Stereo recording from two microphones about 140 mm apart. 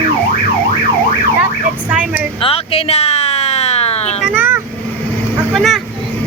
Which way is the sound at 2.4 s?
45° left (ahead or behind).